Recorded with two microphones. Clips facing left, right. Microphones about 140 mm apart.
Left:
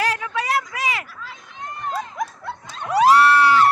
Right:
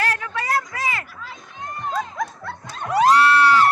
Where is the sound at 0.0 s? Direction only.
15° left (ahead or behind).